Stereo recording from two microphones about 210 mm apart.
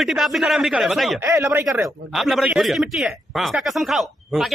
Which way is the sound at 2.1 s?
Centre (ahead or behind).